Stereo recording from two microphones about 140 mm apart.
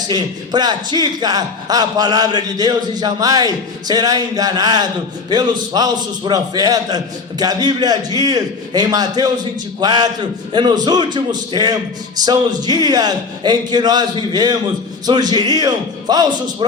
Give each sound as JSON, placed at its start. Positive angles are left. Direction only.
{"t": 0.1, "sound": "a man's voice", "side_deg": -30}